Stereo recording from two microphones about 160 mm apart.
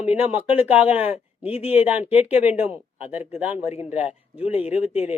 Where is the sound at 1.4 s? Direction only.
40° left (ahead or behind).